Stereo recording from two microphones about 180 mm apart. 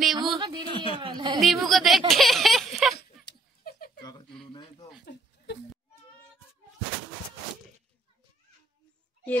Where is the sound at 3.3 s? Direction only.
60° left (ahead or behind).